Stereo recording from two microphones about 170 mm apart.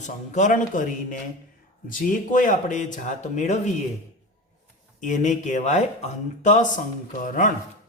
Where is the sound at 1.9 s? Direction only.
50° left (ahead or behind).